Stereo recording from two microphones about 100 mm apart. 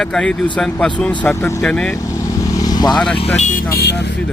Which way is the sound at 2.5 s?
40° left (ahead or behind).